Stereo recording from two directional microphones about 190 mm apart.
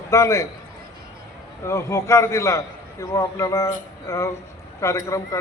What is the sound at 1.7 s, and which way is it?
A man's voice, 15° left (ahead or behind).